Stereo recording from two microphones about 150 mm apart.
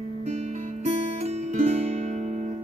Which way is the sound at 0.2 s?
45° right (ahead or behind).